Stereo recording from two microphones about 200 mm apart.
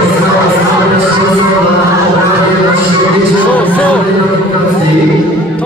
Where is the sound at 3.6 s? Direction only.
5° left (ahead or behind).